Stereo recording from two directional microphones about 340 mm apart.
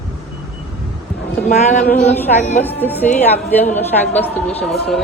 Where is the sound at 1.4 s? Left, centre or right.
Left.